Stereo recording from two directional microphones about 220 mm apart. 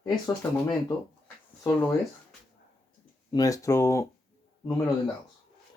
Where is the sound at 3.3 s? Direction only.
15° left (ahead or behind).